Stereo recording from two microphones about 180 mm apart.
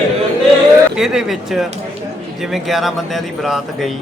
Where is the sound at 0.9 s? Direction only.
Centre (ahead or behind).